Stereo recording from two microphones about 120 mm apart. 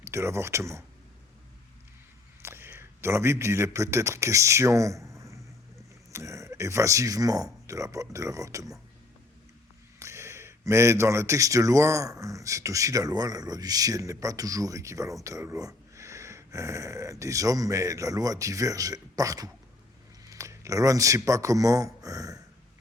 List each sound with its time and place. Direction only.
0.0 s speech: 25° right (ahead or behind)
2.4 s a man's voice: 20° right (ahead or behind)
10.0 s speech: 25° right (ahead or behind)